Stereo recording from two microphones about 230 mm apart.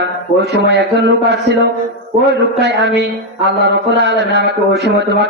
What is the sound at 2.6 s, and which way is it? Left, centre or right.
A man's voice, right.